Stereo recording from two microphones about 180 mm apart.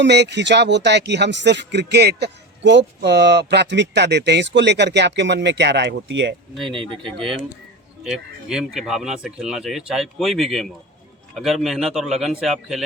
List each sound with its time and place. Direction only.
0.0 s speech: 70° right (ahead or behind)
6.7 s speech: 30° right (ahead or behind)
8.0 s speech: 5° right (ahead or behind)